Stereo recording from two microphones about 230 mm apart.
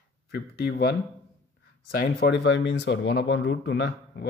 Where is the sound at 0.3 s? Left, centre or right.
Left.